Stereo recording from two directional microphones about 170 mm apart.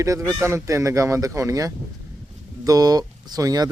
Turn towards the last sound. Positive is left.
turn(degrees=-20)  # may be behind; listen again after turning